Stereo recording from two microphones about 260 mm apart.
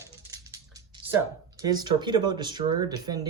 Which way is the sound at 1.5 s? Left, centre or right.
Centre.